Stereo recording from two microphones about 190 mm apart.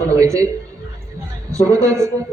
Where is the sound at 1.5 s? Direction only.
15° right (ahead or behind).